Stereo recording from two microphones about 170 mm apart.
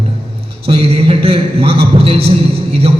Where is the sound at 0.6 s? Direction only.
35° right (ahead or behind).